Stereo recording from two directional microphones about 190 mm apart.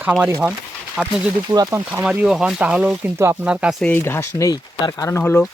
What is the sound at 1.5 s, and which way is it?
Speech, 20° right (ahead or behind).